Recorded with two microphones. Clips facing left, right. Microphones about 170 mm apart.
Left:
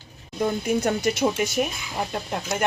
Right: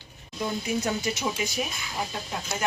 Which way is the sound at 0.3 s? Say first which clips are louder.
Left 5 dB; 55° left (ahead or behind).